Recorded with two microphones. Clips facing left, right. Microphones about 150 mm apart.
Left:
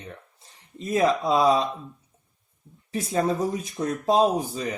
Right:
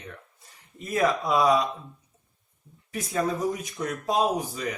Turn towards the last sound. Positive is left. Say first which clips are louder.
# left 4 dB
turn(degrees=30)  # may be behind; listen again after turning